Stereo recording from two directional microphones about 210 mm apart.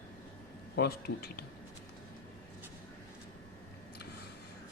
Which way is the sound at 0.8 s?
50° left (ahead or behind).